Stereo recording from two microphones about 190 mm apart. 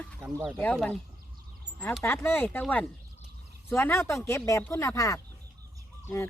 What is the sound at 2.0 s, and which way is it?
Speech, 15° left (ahead or behind).